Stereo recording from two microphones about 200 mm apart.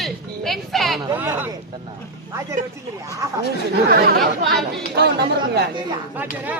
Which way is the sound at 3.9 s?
50° right (ahead or behind).